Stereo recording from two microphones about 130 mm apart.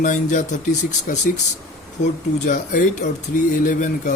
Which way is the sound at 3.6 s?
75° left (ahead or behind).